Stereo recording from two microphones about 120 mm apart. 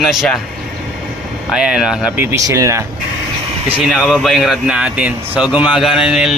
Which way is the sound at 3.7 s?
5° right (ahead or behind).